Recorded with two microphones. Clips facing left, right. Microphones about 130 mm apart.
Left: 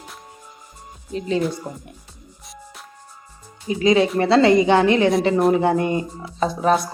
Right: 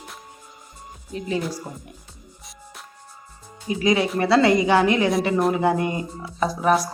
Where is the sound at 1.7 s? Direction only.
Centre (ahead or behind).